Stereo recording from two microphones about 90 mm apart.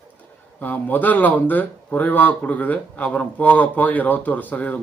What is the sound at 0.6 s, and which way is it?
A man's voice, 20° left (ahead or behind).